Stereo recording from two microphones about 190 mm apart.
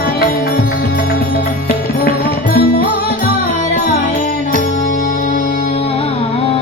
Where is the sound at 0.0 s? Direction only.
55° left (ahead or behind).